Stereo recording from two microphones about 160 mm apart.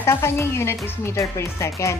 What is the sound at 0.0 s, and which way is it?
Speech, 15° left (ahead or behind).